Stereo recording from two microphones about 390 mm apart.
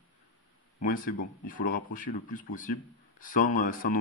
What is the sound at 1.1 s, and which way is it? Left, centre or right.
Speech, left.